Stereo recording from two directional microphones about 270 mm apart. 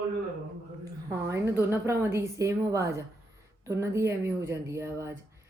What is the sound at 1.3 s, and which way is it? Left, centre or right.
A woman's voice, centre.